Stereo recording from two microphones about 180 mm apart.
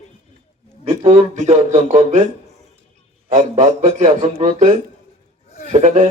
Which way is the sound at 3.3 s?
45° right (ahead or behind).